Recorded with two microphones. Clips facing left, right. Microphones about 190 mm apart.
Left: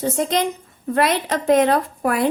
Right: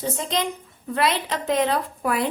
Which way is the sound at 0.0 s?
45° left (ahead or behind).